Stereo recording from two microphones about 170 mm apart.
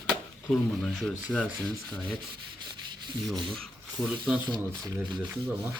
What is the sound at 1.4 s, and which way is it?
Speech, 10° right (ahead or behind).